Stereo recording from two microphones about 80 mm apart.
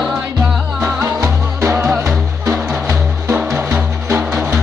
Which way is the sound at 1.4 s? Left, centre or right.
Right.